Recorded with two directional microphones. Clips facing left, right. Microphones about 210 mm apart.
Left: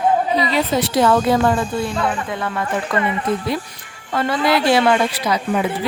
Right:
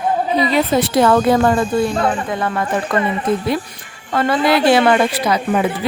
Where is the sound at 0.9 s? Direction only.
55° right (ahead or behind).